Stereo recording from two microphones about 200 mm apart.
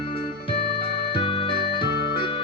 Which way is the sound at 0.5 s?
55° left (ahead or behind).